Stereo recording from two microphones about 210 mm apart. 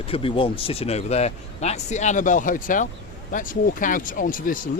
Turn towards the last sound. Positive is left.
turn(degrees=40)  # may be behind; listen again after turning